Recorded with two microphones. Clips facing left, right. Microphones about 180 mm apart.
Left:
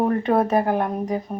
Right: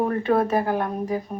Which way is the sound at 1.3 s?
40° left (ahead or behind).